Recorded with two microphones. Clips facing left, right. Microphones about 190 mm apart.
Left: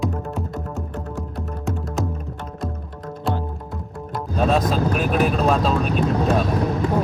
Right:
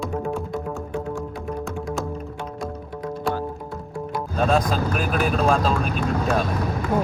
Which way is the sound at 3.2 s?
20° left (ahead or behind).